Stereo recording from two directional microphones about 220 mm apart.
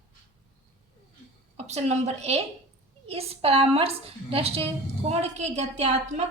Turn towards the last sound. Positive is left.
turn(degrees=-30)  # may be behind; listen again after turning